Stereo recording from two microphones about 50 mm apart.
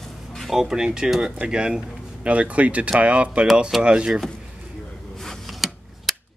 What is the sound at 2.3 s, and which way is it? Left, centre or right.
Speech, right.